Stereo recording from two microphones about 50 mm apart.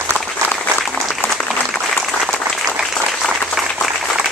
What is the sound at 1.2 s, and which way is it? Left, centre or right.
Applause, left.